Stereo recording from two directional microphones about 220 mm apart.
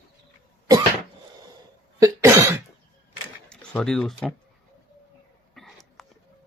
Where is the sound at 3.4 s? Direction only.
5° left (ahead or behind).